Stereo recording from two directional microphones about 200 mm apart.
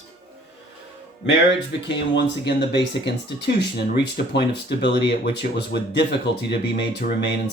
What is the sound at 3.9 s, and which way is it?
Speech, 55° left (ahead or behind).